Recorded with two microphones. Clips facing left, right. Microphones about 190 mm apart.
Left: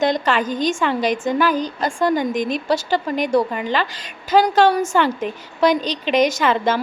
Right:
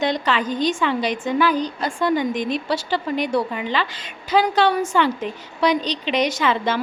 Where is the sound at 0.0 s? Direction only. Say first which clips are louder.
Left 3 dB; 45° left (ahead or behind).